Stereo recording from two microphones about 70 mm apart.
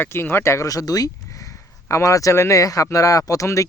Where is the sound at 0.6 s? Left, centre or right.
Left.